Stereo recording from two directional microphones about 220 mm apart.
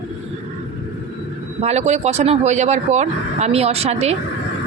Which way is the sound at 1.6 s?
30° right (ahead or behind).